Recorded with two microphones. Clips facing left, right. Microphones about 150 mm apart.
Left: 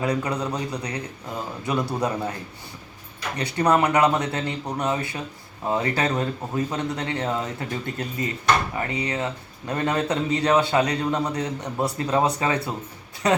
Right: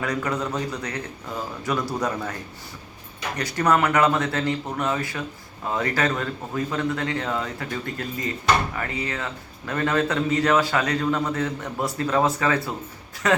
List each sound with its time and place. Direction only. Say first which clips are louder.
0.2 s a man's voice: even; 15° left (ahead or behind)
1.6 s speech: left 1 dB; 25° left (ahead or behind)
3.3 s speech: left 1 dB; 30° left (ahead or behind)
3.9 s a man's voice: even; 15° left (ahead or behind)